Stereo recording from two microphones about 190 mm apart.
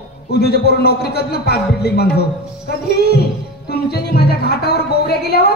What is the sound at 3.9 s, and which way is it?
A man's voice, 55° left (ahead or behind).